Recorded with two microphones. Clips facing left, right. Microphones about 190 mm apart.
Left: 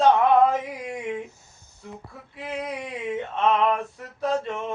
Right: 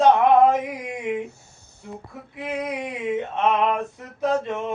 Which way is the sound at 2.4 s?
20° right (ahead or behind).